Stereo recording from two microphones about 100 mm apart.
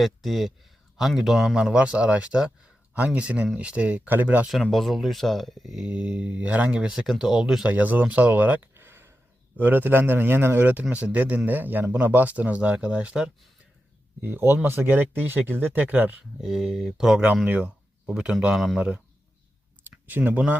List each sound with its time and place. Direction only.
0.0 s speech: centre (ahead or behind); by 4.4 s 15° right (ahead or behind)
4.4 s speech: centre (ahead or behind)
7.7 s speech: 15° right (ahead or behind)
14.2 s speech: 20° right (ahead or behind)
16.4 s speech: 5° right (ahead or behind)
20.1 s speech: 20° right (ahead or behind)